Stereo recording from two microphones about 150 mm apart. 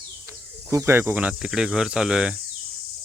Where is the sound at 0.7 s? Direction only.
15° right (ahead or behind).